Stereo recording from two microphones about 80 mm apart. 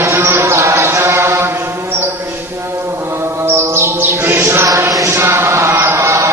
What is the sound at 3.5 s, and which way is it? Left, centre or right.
Music, right.